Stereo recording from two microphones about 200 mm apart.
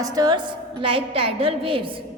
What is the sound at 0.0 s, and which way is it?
A woman's voice, 20° right (ahead or behind).